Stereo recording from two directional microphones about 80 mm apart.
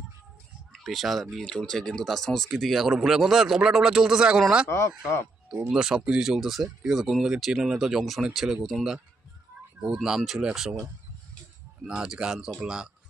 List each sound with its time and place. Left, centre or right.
0.7 s speech: centre
4.6 s speech: left
5.7 s speech: centre